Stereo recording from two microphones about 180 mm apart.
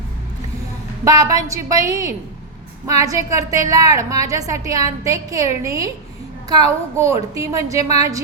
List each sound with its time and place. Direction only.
1.0 s a woman's voice: 20° right (ahead or behind)